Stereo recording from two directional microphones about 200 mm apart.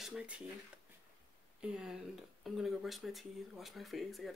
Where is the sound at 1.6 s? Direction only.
5° right (ahead or behind).